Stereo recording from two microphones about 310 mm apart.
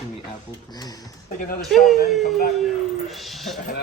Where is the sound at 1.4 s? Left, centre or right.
Left.